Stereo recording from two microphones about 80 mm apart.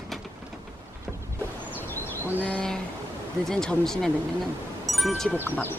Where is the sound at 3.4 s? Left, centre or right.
Centre.